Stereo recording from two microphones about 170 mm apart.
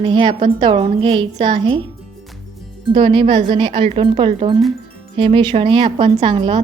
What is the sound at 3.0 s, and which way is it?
A woman's voice, 30° right (ahead or behind).